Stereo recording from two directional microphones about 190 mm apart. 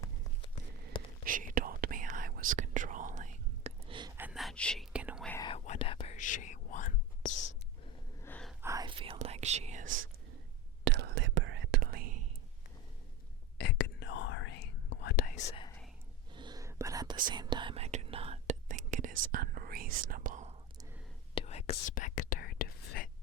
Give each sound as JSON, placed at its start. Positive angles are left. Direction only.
{"t": 0.0, "sound": "a sound", "side_deg": 25}
{"t": 1.2, "sound": "whispering", "side_deg": -45}
{"t": 4.2, "sound": "whispering", "side_deg": -5}
{"t": 5.4, "sound": "whispering", "side_deg": 30}
{"t": 6.1, "sound": "whispering", "side_deg": 40}
{"t": 8.2, "sound": "a sound", "side_deg": 5}
{"t": 8.6, "sound": "whispering", "side_deg": -20}
{"t": 9.8, "sound": "whispering", "side_deg": -90}
{"t": 10.8, "sound": "whispering", "side_deg": -60}
{"t": 13.6, "sound": "whispering", "side_deg": 60}
{"t": 16.3, "sound": "whispering", "side_deg": -25}
{"t": 18.7, "sound": "whispering", "side_deg": -40}
{"t": 21.3, "sound": "whispering", "side_deg": 35}